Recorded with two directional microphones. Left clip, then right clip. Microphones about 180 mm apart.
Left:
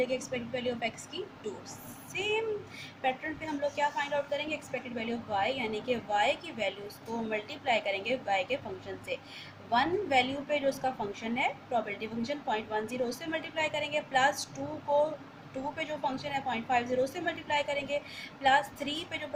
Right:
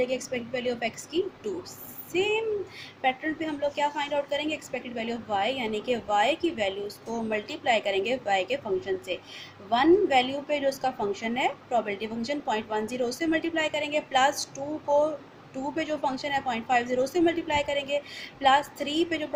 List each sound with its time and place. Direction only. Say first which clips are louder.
0.0 s a woman's voice: right 3 dB; 45° right (ahead or behind)
2.1 s a woman's voice: right 5 dB; 50° right (ahead or behind)
15.7 s a woman's voice: right 6 dB; 50° right (ahead or behind)